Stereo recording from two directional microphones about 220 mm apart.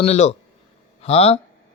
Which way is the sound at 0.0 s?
30° left (ahead or behind).